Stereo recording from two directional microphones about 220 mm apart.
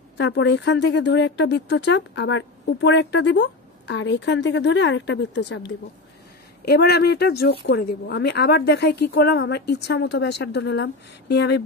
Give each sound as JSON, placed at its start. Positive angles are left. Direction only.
{"t": 0.2, "sound": "speech", "side_deg": 55}